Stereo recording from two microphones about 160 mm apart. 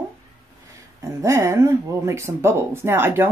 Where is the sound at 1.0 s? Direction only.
20° right (ahead or behind).